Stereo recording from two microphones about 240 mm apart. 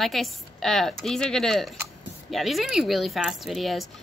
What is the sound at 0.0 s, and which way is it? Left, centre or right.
A woman's voice, centre.